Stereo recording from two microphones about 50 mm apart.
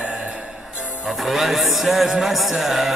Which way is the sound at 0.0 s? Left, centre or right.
Centre.